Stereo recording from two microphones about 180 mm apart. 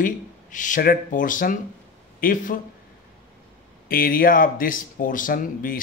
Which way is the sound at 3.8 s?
55° left (ahead or behind).